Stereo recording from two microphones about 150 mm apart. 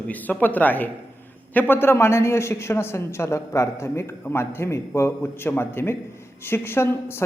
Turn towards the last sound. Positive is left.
turn(degrees=15)  # may be behind; listen again after turning